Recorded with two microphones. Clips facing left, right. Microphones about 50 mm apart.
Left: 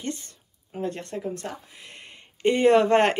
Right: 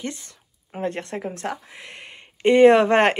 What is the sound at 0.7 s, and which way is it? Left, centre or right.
Speech, right.